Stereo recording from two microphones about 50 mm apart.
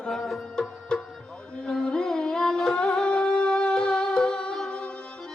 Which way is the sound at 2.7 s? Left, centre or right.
Centre.